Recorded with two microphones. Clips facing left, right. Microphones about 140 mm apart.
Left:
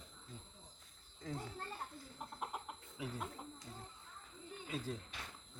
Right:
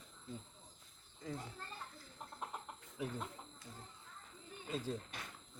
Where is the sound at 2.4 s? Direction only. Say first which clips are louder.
Left 2 dB; 10° left (ahead or behind).